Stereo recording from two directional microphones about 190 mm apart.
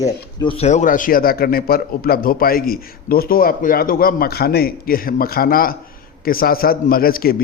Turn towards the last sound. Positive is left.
turn(degrees=50)  # may be behind; listen again after turning